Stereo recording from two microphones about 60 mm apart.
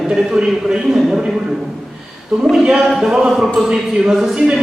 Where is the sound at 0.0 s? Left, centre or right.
Centre.